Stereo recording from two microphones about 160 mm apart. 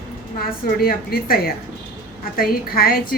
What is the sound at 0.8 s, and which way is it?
A woman's voice, 70° left (ahead or behind).